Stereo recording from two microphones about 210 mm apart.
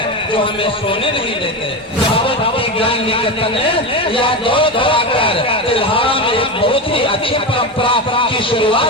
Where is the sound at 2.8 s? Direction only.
25° left (ahead or behind).